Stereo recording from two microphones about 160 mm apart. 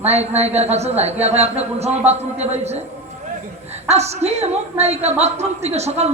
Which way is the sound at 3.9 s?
45° right (ahead or behind).